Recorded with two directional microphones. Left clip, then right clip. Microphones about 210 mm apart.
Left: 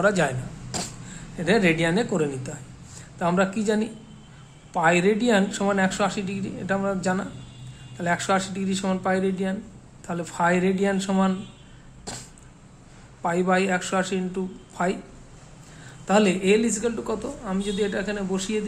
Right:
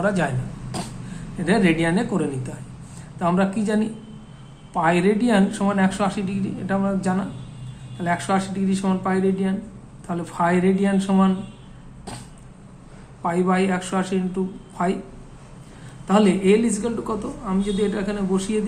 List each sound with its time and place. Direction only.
0.0 s a woman's voice: 30° left (ahead or behind)
13.2 s a woman's voice: 30° left (ahead or behind)
16.0 s a woman's voice: 30° left (ahead or behind)